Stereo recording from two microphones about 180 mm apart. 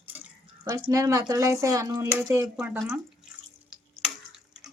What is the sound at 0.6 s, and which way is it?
Speech, 20° right (ahead or behind).